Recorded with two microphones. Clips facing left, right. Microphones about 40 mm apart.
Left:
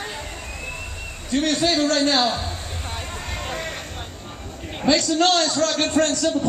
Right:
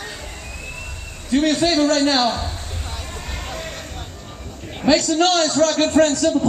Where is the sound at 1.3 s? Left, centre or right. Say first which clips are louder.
Right 3 dB; centre.